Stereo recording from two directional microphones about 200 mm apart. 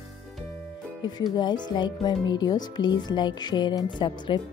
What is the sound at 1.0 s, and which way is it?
Speech, 20° left (ahead or behind).